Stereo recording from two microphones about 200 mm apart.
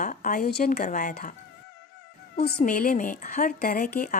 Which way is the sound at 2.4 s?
50° left (ahead or behind).